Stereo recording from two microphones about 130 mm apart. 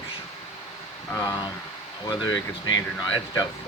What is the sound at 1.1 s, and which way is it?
Speech, 25° left (ahead or behind).